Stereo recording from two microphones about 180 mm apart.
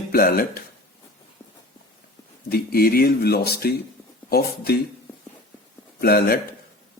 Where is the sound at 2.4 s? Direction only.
55° left (ahead or behind).